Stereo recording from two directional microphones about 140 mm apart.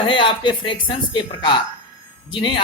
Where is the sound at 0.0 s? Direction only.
40° left (ahead or behind).